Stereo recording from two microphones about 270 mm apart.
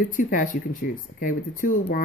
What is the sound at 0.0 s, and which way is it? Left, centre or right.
Speech, left.